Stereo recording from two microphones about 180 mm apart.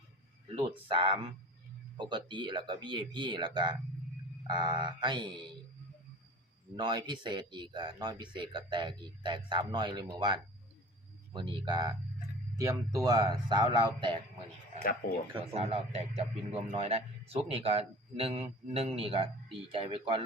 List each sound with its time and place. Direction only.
0.5 s speech: 30° right (ahead or behind)
6.7 s speech: 25° right (ahead or behind)
15.4 s a man's voice: 35° right (ahead or behind)